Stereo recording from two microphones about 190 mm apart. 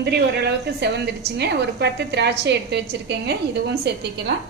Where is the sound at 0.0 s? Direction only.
60° right (ahead or behind).